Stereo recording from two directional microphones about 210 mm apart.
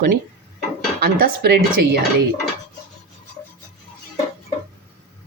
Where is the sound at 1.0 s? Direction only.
45° right (ahead or behind).